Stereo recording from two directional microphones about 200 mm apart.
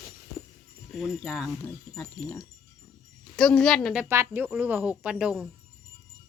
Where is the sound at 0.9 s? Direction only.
Centre (ahead or behind).